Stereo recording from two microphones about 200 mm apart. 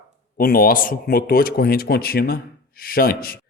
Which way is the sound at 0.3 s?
45° left (ahead or behind).